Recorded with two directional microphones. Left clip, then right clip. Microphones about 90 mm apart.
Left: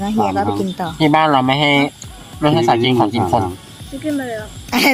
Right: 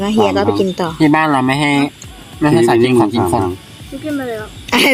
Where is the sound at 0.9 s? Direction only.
Centre (ahead or behind).